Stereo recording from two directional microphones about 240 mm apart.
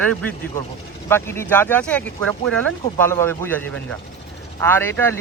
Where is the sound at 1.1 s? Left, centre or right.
Centre.